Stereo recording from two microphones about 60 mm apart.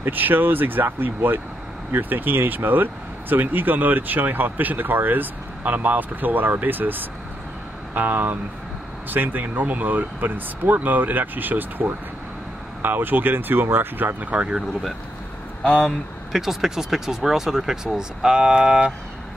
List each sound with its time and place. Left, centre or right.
0.0 s speech: right
14.3 s speech: centre
16.3 s speech: centre